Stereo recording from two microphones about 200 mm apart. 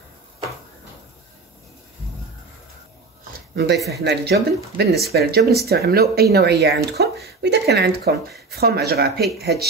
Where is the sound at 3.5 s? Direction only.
55° right (ahead or behind).